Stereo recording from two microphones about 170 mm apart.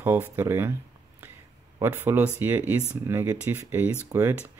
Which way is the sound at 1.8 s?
15° right (ahead or behind).